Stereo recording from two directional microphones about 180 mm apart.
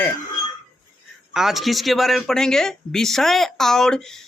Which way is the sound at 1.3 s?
Centre (ahead or behind).